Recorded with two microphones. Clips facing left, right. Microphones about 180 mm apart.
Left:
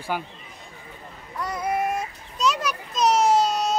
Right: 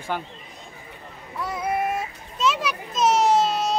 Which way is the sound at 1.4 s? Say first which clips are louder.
Even; centre (ahead or behind).